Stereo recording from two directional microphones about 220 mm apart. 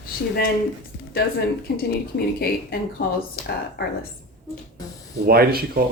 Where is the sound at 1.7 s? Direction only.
45° left (ahead or behind).